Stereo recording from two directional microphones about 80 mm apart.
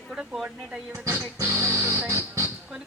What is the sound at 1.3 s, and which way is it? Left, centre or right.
Music, right.